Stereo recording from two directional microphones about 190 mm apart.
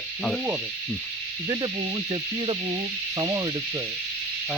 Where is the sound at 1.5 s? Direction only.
25° right (ahead or behind).